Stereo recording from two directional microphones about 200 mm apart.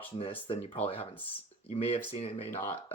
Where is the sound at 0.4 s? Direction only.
25° left (ahead or behind).